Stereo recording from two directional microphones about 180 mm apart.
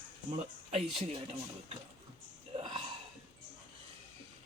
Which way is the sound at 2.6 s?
25° right (ahead or behind).